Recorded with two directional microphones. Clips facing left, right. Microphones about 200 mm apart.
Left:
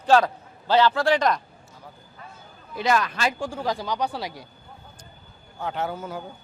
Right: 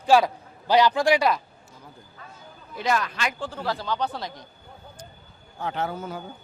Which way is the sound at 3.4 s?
10° left (ahead or behind).